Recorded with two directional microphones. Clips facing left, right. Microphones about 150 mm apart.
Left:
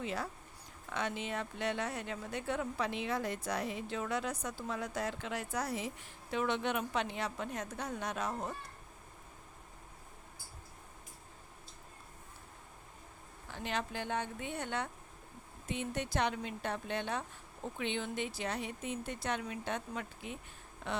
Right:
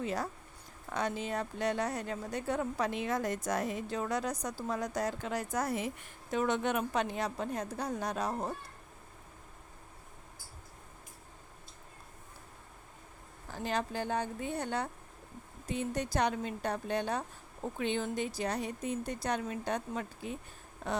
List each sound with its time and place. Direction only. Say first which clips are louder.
0.0 s speech: right 3 dB; 40° right (ahead or behind)
13.5 s speech: right 4 dB; 40° right (ahead or behind)